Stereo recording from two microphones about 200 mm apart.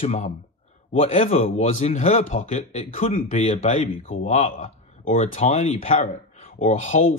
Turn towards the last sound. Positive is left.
turn(degrees=40)  # may be behind; listen again after turning